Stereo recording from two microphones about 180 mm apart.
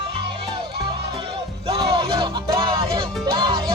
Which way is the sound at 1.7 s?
25° right (ahead or behind).